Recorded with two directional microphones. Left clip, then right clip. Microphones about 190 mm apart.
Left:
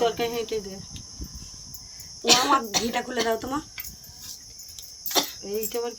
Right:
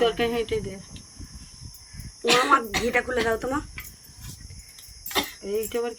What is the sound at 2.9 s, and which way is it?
Speech, 25° left (ahead or behind).